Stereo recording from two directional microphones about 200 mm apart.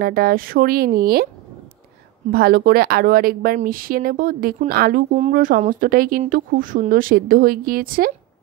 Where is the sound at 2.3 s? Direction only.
50° right (ahead or behind).